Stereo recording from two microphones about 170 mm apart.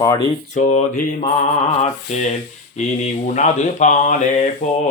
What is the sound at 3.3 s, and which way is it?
Speech, 45° left (ahead or behind).